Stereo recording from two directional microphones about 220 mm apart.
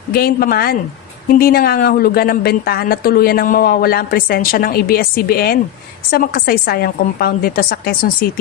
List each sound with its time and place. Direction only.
0.1 s a woman's voice: 45° left (ahead or behind)